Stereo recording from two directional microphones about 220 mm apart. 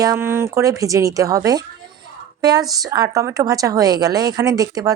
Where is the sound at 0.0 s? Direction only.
15° right (ahead or behind).